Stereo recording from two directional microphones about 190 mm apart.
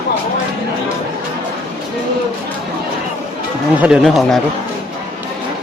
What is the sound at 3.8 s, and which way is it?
Speech, 5° right (ahead or behind).